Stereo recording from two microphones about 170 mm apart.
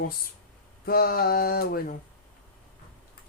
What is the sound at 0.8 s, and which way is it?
Speech, 60° left (ahead or behind).